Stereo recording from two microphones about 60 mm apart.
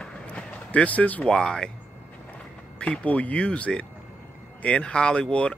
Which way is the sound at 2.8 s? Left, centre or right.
Left.